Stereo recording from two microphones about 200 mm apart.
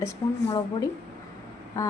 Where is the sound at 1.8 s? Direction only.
15° left (ahead or behind).